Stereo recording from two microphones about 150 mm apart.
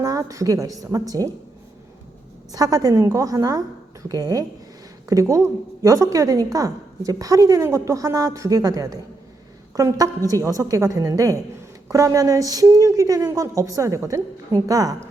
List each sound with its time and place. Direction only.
0.0 s a woman's voice: 25° right (ahead or behind)
2.5 s a woman's voice: 25° right (ahead or behind)